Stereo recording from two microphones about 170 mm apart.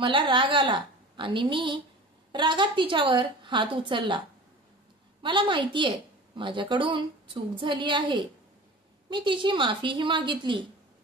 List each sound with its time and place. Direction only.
0.0 s a woman's voice: 30° right (ahead or behind)
5.2 s a woman's voice: 30° right (ahead or behind)